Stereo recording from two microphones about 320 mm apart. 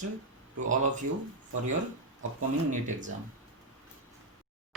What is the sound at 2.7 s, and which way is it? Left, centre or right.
Speech, right.